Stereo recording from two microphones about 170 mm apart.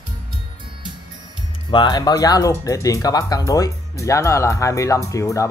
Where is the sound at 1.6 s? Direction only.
30° left (ahead or behind).